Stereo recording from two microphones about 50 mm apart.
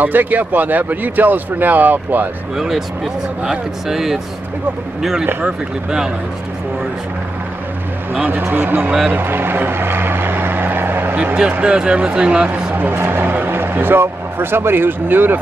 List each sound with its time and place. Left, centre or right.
0.0 s speech: right
2.5 s speech: centre
5.4 s speech: centre
8.3 s a man's voice: right
9.1 s vehicle: right
11.6 s speech: centre
12.7 s speech: right